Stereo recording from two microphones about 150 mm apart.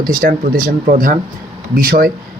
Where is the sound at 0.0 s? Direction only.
70° right (ahead or behind).